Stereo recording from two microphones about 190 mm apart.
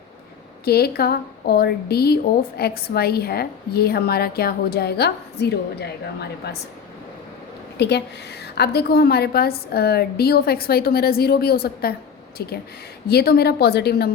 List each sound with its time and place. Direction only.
0.6 s speech: 55° left (ahead or behind)
7.8 s a woman's voice: 65° left (ahead or behind)